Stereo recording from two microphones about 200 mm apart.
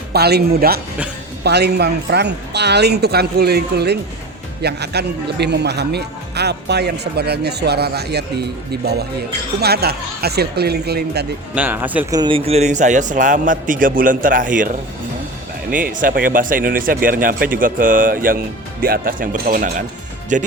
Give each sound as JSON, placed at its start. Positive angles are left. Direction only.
{"t": 0.1, "sound": "speech", "side_deg": -55}
{"t": 11.5, "sound": "speech", "side_deg": -10}
{"t": 12.2, "sound": "a man's voice", "side_deg": -30}